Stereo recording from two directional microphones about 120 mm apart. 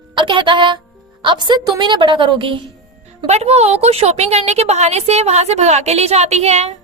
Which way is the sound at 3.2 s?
60° right (ahead or behind).